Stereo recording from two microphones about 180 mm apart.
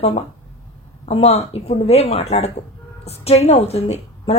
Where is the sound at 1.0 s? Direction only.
35° left (ahead or behind).